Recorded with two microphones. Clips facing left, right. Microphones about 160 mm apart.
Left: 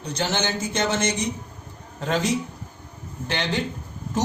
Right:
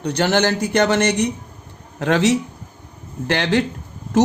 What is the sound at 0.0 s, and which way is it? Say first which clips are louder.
A man's voice: right 8 dB; 65° right (ahead or behind).